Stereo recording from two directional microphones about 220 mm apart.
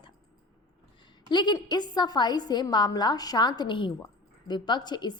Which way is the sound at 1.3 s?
20° left (ahead or behind).